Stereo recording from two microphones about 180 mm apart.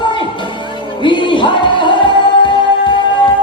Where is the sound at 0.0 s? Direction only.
25° left (ahead or behind).